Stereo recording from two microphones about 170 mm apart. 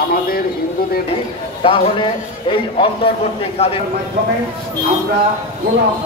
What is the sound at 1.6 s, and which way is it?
A man's voice, 30° left (ahead or behind).